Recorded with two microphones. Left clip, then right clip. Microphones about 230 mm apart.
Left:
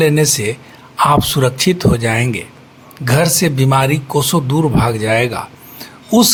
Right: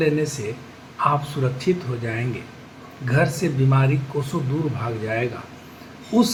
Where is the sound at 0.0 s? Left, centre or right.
Left.